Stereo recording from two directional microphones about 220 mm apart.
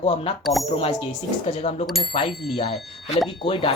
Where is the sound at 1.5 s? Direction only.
25° left (ahead or behind).